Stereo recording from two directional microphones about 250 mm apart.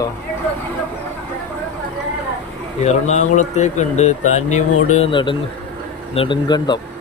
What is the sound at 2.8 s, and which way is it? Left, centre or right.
Speech, left.